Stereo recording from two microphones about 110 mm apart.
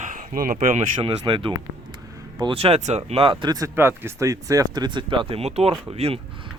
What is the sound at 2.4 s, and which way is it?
Speech, 60° right (ahead or behind).